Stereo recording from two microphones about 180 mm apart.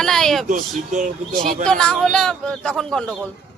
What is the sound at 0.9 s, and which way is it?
Speech, 45° right (ahead or behind).